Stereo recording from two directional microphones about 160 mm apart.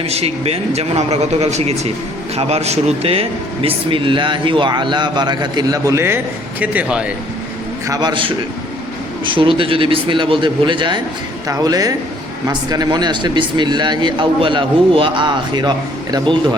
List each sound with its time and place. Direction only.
0.0 s a man's voice: 40° right (ahead or behind); by 7.1 s 5° right (ahead or behind)
7.9 s a man's voice: 30° right (ahead or behind)